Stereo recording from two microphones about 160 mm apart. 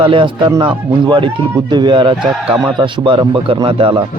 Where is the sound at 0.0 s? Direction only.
30° right (ahead or behind).